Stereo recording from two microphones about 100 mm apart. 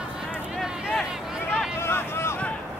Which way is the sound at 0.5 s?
5° right (ahead or behind).